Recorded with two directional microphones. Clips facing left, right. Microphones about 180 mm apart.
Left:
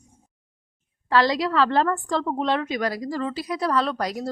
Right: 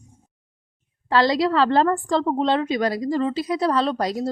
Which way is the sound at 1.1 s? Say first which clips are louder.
Right 2 dB; 30° right (ahead or behind).